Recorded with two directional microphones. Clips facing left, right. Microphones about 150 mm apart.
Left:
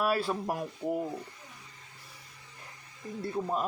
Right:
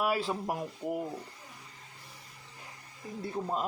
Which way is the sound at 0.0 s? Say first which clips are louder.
Left 1 dB; 20° right (ahead or behind).